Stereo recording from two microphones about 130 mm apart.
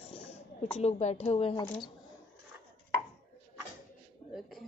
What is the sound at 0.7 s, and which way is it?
Speech, 55° left (ahead or behind).